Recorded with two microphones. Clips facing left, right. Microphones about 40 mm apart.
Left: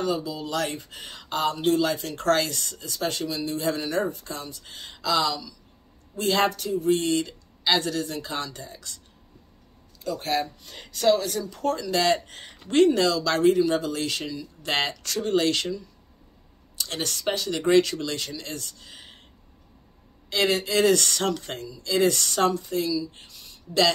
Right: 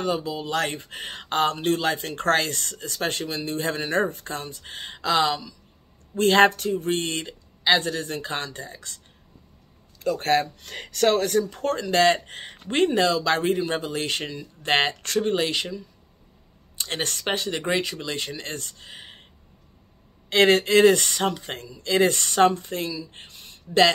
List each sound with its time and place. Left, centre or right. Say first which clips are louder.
0.0 s a woman's voice: right 1 dB; right
10.6 s speech: right 2 dB; right
15.3 s speech: left 2 dB; centre
16.7 s speech: right 2 dB; right
20.2 s speech: right 6 dB; right
20.9 s speech: even; right
21.5 s speech: right 4 dB; right